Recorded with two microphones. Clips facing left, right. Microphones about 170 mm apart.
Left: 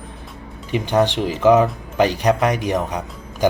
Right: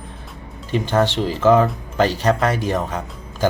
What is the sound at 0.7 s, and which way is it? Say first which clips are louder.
Speech: left 1 dB; 15° left (ahead or behind).